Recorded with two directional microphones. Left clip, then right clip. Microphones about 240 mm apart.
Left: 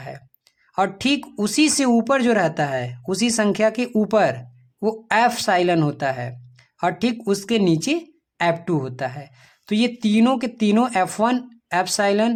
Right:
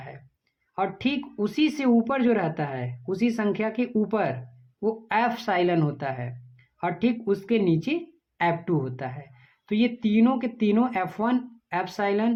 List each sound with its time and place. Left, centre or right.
0.8 s speech: left